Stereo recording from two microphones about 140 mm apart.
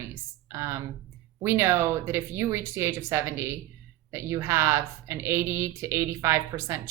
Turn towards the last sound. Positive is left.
turn(degrees=-20)  # may be behind; listen again after turning